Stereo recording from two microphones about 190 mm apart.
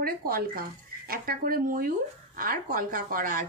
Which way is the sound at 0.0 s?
50° right (ahead or behind).